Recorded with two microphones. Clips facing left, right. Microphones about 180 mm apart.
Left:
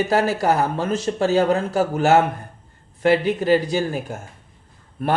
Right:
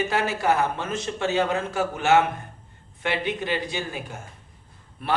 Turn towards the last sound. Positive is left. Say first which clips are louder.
# left 6 dB
turn(degrees=45)  # may be behind; listen again after turning